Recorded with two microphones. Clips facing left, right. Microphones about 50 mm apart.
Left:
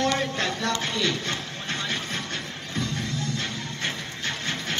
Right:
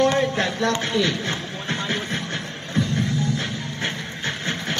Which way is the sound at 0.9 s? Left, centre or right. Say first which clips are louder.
Right 4 dB; centre.